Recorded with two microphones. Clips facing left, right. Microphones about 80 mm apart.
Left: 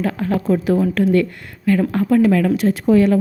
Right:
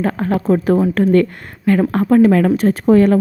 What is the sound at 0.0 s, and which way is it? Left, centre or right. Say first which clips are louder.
Speech: right 2 dB; right.